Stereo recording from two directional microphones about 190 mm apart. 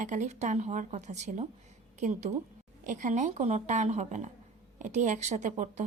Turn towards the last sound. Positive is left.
turn(degrees=-40)  # may be behind; listen again after turning